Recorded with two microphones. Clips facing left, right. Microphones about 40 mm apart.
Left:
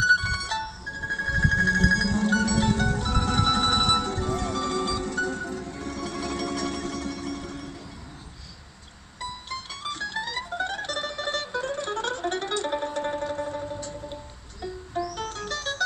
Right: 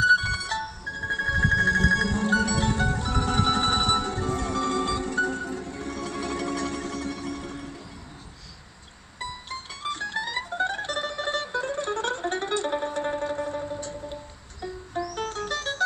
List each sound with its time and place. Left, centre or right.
0.0 s music: centre
9.7 s music: centre
10.1 s music: centre
10.4 s music: centre
15.1 s music: right